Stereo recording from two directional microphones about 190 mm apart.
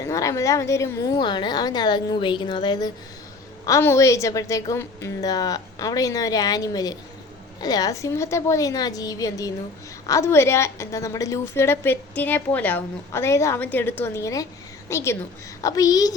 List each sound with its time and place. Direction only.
0.0 s a woman's voice: 15° left (ahead or behind)